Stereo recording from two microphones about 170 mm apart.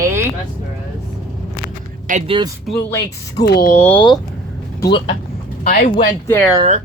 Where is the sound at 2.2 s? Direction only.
30° right (ahead or behind).